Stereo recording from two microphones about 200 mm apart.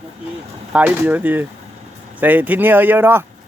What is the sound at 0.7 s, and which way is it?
Speech, 10° right (ahead or behind).